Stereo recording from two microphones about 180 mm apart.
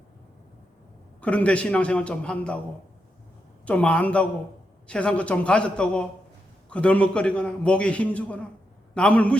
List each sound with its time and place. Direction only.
1.2 s a man's voice: 5° left (ahead or behind)
3.7 s a man's voice: 5° left (ahead or behind)